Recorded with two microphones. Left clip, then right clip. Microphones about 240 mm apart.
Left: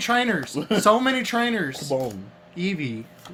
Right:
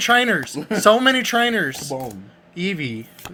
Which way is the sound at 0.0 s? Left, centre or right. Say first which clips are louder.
Right 6 dB; right.